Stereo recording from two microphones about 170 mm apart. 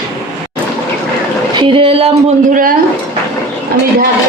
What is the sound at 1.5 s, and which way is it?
Speech, 30° right (ahead or behind).